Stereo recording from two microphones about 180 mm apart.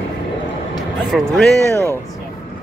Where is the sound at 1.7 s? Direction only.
15° right (ahead or behind).